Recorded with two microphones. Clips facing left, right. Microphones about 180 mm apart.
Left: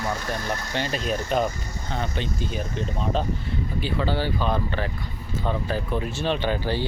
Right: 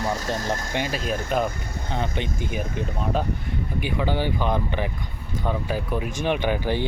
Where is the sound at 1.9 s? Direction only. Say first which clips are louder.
Right 1 dB; 15° right (ahead or behind).